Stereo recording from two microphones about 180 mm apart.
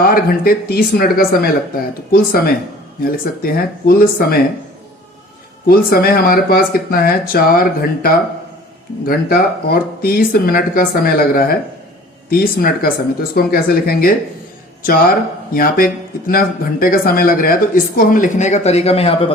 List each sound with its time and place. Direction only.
0.0 s speech: 55° left (ahead or behind)
5.6 s speech: 55° left (ahead or behind); by 19.3 s 30° left (ahead or behind)